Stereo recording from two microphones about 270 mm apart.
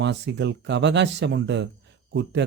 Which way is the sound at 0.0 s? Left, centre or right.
Right.